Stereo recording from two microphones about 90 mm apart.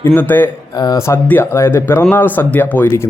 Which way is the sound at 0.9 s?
30° left (ahead or behind).